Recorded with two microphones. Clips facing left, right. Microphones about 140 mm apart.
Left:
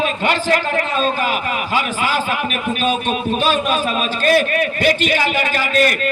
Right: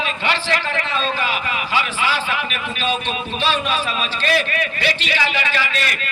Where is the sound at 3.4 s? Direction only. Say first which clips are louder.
Left 1 dB; 45° left (ahead or behind).